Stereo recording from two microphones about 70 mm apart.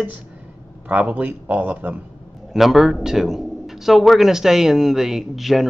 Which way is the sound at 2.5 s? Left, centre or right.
Centre.